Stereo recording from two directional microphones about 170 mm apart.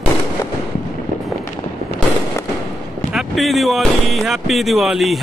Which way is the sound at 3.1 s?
Centre (ahead or behind).